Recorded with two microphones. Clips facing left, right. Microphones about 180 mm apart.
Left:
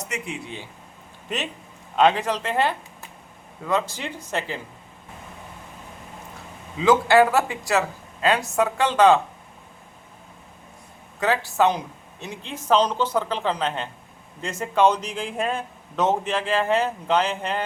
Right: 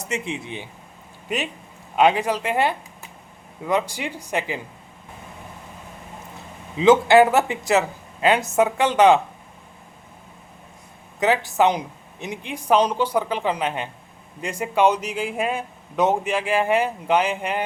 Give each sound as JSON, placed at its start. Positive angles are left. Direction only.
{"t": 0.1, "sound": "speech", "side_deg": -20}
{"t": 1.3, "sound": "a man's voice", "side_deg": -10}
{"t": 6.7, "sound": "speech", "side_deg": -20}
{"t": 11.2, "sound": "a man's voice", "side_deg": -20}